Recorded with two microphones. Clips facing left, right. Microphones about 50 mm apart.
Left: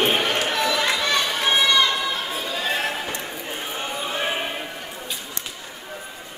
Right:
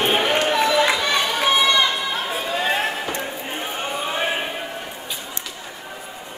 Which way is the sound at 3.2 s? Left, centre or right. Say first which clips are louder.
Right 3 dB; centre.